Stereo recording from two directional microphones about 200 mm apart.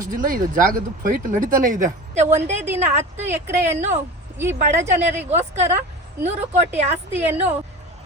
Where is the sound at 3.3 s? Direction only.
10° right (ahead or behind).